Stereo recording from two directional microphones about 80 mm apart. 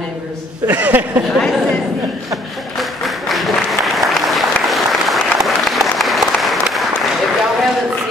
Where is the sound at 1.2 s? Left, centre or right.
Centre.